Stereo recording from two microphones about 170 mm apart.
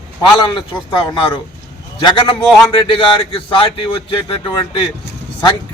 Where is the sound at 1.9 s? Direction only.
25° left (ahead or behind).